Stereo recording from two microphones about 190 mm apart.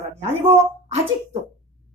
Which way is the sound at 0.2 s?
35° right (ahead or behind).